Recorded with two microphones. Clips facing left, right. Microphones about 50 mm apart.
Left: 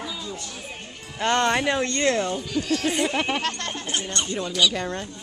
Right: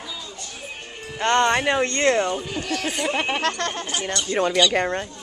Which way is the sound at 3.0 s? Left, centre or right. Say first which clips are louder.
Right 1 dB; centre.